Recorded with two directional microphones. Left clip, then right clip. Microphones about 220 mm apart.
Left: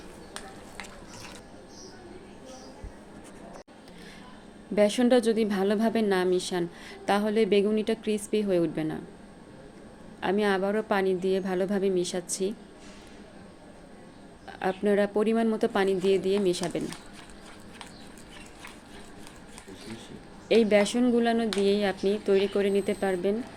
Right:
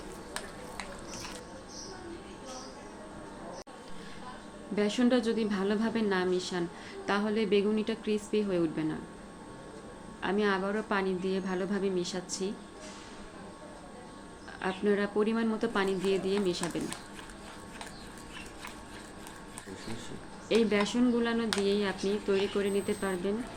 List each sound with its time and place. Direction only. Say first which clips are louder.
4.7 s a woman's voice: left 6 dB; 45° left (ahead or behind)
10.2 s a woman's voice: left 4 dB; 45° left (ahead or behind)
14.6 s a woman's voice: left 5 dB; 45° left (ahead or behind)
20.5 s a woman's voice: left 6 dB; 45° left (ahead or behind)